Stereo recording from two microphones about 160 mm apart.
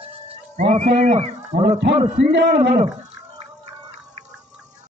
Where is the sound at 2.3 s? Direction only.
90° right.